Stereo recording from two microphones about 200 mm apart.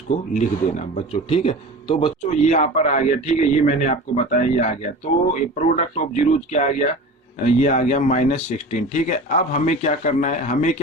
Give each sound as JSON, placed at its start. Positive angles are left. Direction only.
{"t": 0.3, "sound": "a man's voice", "side_deg": 35}